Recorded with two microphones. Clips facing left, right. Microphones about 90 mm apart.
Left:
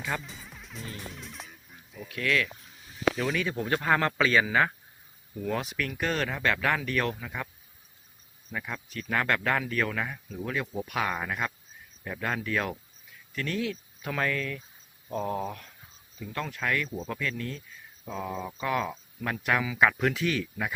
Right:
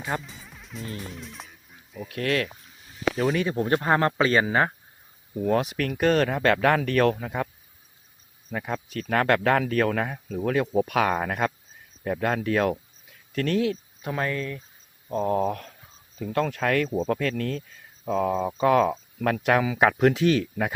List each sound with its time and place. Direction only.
0.2 s music: centre (ahead or behind)
2.0 s speech: 40° right (ahead or behind)
3.6 s a man's voice: 25° right (ahead or behind); by 7.4 s 45° right (ahead or behind)
8.4 s a man's voice: 40° right (ahead or behind)
14.0 s speech: 30° right (ahead or behind)
15.4 s a man's voice: 55° right (ahead or behind)
16.9 s a man's voice: 45° right (ahead or behind)